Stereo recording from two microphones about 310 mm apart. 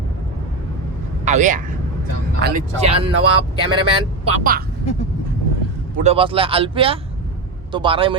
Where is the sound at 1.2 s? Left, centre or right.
Right.